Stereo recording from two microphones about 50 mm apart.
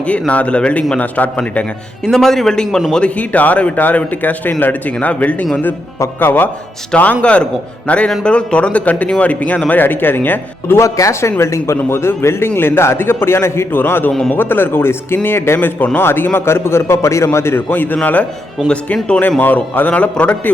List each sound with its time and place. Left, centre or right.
0.0 s a man's voice: left
2.0 s a man's voice: centre
3.2 s a man's voice: left
6.1 s a man's voice: left
6.9 s speech: left
9.8 s a man's voice: left
10.8 s a man's voice: left
17.7 s a man's voice: left
19.4 s a man's voice: left